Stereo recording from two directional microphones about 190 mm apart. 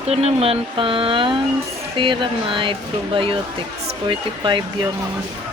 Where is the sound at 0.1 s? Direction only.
35° right (ahead or behind).